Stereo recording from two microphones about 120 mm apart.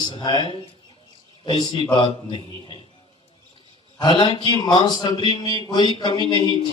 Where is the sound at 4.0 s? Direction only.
35° left (ahead or behind).